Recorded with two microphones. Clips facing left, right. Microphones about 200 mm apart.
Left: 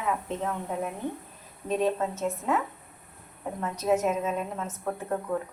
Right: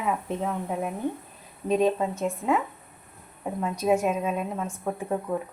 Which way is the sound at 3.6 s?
10° right (ahead or behind).